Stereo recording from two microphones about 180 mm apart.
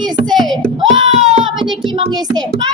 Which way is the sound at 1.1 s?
35° right (ahead or behind).